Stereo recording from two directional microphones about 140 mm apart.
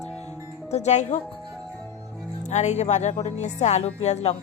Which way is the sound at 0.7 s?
55° left (ahead or behind).